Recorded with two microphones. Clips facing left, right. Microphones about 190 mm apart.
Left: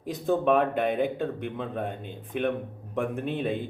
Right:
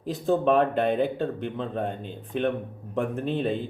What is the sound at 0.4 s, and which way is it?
Speech, 10° left (ahead or behind).